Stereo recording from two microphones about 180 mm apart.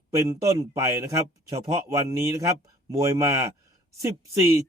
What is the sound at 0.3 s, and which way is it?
A man's voice, 15° right (ahead or behind).